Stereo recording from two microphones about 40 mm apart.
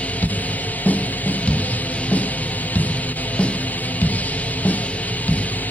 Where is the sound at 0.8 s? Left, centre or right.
Left.